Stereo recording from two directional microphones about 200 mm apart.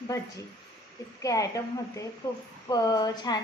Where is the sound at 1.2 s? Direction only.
15° left (ahead or behind).